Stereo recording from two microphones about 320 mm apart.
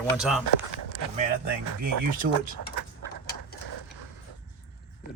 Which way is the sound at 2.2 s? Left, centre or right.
Right.